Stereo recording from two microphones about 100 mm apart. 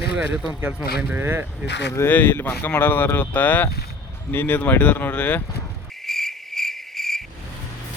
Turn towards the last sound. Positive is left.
turn(degrees=0)  # may be behind; listen again after turning